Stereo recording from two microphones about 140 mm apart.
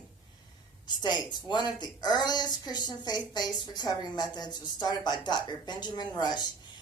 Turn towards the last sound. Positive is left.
turn(degrees=30)  # may be behind; listen again after turning